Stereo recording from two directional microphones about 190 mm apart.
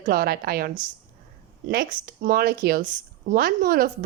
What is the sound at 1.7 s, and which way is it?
A woman's voice, 55° right (ahead or behind).